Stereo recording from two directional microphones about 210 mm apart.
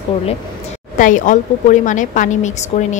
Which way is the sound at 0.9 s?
40° left (ahead or behind).